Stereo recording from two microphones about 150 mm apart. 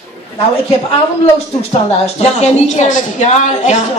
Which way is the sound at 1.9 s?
45° left (ahead or behind).